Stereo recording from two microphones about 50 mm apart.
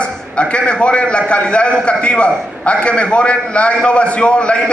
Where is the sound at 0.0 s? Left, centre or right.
Left.